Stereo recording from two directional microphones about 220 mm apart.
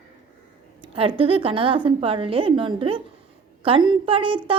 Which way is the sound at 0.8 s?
25° right (ahead or behind).